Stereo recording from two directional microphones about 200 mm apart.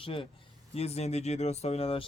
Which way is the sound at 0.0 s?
25° left (ahead or behind).